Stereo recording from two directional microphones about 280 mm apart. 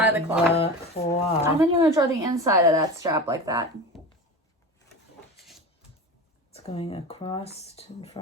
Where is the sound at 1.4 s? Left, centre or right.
Centre.